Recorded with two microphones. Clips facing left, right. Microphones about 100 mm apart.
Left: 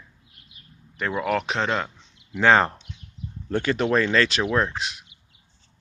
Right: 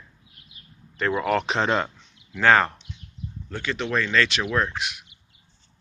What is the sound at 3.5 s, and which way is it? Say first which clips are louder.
Speech: left 5 dB; 45° left (ahead or behind).